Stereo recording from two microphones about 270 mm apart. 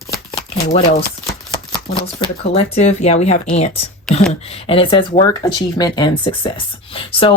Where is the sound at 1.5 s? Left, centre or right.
Centre.